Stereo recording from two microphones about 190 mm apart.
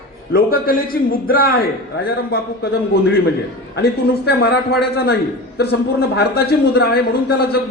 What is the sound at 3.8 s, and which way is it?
A man's voice, 55° left (ahead or behind).